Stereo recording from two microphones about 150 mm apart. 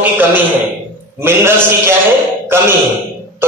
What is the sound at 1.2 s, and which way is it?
A man's voice, 15° right (ahead or behind).